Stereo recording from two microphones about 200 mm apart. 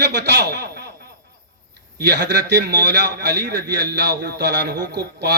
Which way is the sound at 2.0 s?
60° right (ahead or behind).